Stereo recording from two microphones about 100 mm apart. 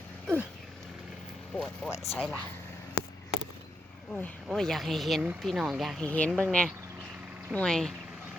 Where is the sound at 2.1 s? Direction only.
Centre (ahead or behind).